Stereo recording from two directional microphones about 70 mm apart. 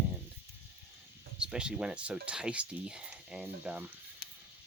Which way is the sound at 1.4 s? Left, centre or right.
Centre.